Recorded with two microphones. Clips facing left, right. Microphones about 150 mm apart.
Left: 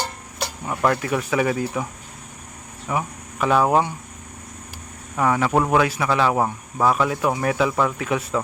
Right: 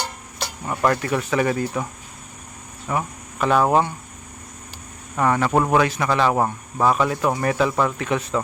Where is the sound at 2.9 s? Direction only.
5° left (ahead or behind).